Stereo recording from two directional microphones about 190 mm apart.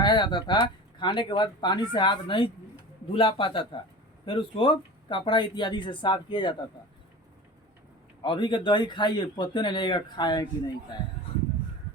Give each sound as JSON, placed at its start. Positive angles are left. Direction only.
{"t": 0.0, "sound": "speech", "side_deg": 25}
{"t": 8.2, "sound": "speech", "side_deg": 25}